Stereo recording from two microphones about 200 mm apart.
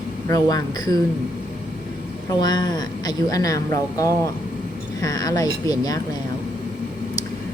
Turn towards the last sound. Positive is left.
turn(degrees=20)  # may be behind; listen again after turning